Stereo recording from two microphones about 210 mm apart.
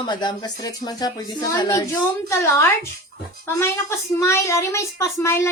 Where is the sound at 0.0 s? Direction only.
20° left (ahead or behind).